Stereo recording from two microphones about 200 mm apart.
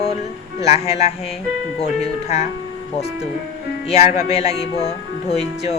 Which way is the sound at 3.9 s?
30° left (ahead or behind).